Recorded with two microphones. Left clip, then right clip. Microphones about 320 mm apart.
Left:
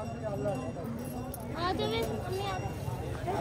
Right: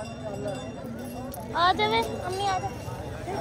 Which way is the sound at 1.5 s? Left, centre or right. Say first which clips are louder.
Right 10 dB; centre.